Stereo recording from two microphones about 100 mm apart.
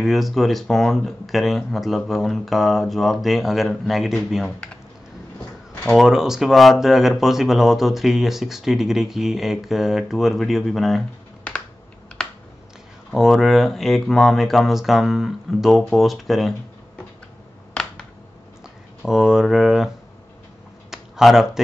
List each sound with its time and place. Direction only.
0.0 s speech: centre (ahead or behind)
5.9 s speech: 5° right (ahead or behind)
12.2 s computer keyboard: 5° left (ahead or behind)
13.1 s speech: centre (ahead or behind)
19.0 s speech: 5° right (ahead or behind)
20.9 s speech: 5° right (ahead or behind)